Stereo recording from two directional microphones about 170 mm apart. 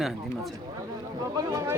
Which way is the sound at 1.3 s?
20° right (ahead or behind).